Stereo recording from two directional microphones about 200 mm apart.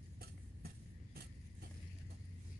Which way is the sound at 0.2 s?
50° right (ahead or behind).